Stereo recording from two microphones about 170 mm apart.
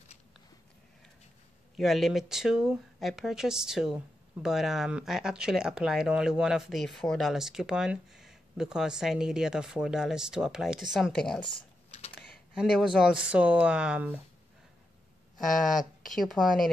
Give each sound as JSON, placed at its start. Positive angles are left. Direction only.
{"t": 1.8, "sound": "speech", "side_deg": 0}
{"t": 11.5, "sound": "typing", "side_deg": 40}
{"t": 12.2, "sound": "speech", "side_deg": 0}
{"t": 16.1, "sound": "speech", "side_deg": 0}